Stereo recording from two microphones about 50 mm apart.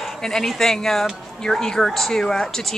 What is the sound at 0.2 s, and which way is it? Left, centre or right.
A woman's voice, centre.